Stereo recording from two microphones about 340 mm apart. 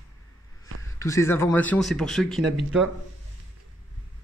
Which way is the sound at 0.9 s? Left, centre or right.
Centre.